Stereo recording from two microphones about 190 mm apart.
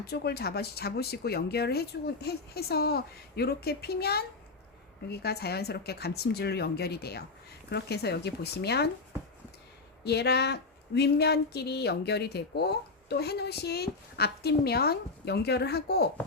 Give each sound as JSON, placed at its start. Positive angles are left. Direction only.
{"t": 0.0, "sound": "speech", "side_deg": 55}
{"t": 10.0, "sound": "speech", "side_deg": 60}